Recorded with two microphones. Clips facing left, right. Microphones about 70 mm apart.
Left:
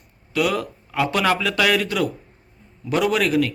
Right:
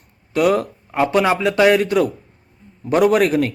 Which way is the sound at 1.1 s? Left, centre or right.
Right.